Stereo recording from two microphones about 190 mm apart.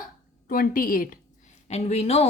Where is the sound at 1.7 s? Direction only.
35° left (ahead or behind).